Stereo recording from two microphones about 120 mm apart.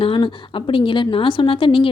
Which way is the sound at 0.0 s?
45° left (ahead or behind).